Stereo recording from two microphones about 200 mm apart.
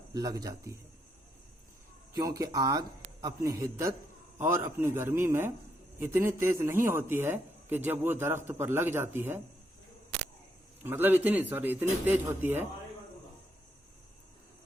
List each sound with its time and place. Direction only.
0.1 s a man's voice: 20° right (ahead or behind)
2.1 s a man's voice: 15° right (ahead or behind)
10.8 s a man's voice: 10° right (ahead or behind)